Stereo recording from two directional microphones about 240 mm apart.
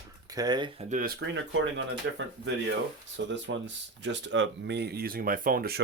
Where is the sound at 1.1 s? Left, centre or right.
Right.